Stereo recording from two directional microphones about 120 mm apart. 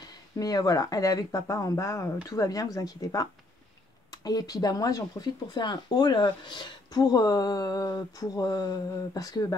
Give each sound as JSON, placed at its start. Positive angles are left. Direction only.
{"t": 0.4, "sound": "speech", "side_deg": 30}